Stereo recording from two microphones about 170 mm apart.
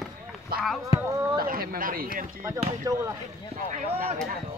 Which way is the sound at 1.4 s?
60° right (ahead or behind).